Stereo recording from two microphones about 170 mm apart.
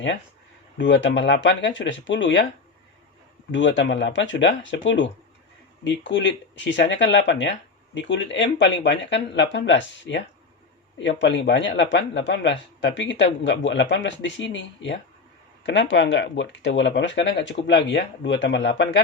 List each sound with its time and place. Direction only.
0.8 s speech: 90° left
3.5 s speech: 90° left